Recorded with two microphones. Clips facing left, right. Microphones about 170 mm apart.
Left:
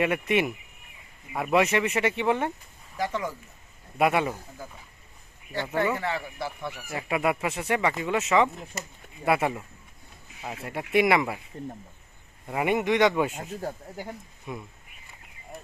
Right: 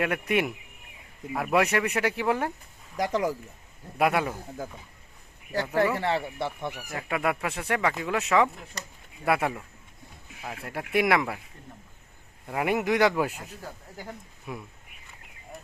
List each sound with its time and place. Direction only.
0.0 s speech: centre (ahead or behind)
3.1 s speech: 35° right (ahead or behind)
3.9 s speech: centre (ahead or behind)
6.0 s speech: 30° right (ahead or behind)
6.9 s speech: 5° left (ahead or behind)
12.5 s speech: centre (ahead or behind)
13.3 s speech: 40° left (ahead or behind)
14.5 s speech: 5° right (ahead or behind)